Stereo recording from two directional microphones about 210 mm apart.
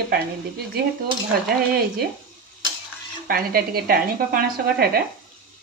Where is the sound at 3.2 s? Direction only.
45° right (ahead or behind).